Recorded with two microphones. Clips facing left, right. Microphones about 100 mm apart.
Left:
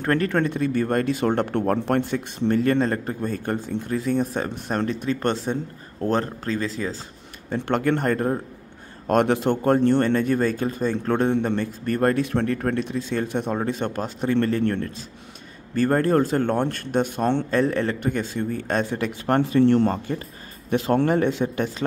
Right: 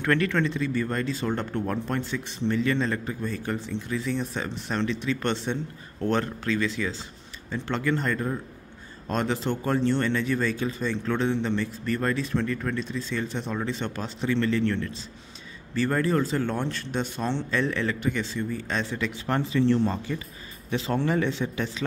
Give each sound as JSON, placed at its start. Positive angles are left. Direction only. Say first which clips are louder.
{"t": 0.0, "sound": "speech", "louder": "left 3 dB", "side_deg": 40}
{"t": 7.4, "sound": "speech", "louder": "left 5 dB", "side_deg": 55}